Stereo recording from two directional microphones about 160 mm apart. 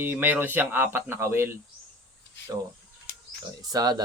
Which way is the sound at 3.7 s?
25° right (ahead or behind).